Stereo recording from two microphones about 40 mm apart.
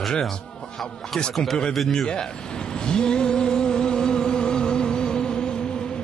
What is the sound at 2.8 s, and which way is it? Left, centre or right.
Music, left.